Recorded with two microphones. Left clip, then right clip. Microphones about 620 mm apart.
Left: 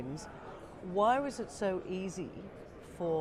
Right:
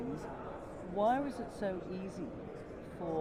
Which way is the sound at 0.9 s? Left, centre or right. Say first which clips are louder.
Left 3 dB; left.